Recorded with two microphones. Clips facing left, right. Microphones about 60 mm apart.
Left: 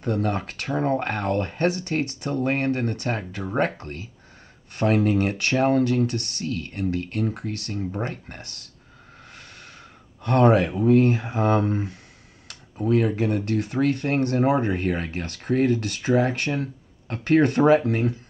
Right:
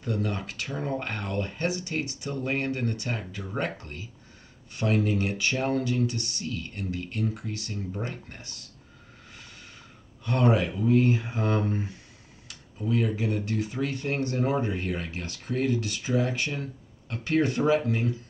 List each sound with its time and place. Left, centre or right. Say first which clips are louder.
0.0 s speech: left 6 dB; left
10.2 s speech: left 6 dB; left